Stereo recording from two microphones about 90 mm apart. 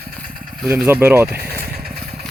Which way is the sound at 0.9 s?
25° right (ahead or behind).